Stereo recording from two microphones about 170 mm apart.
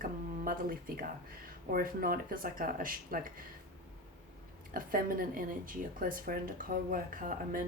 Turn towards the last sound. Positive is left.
turn(degrees=-55)  # may be behind; listen again after turning